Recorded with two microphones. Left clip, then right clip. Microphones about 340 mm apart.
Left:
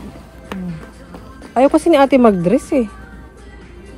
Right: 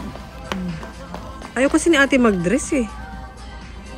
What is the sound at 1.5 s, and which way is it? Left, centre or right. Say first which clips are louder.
Speech: left 5 dB; centre.